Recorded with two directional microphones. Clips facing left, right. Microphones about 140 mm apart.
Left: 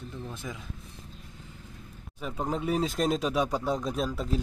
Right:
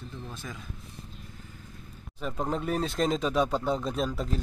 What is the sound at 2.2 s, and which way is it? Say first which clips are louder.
Speech: even; 10° left (ahead or behind).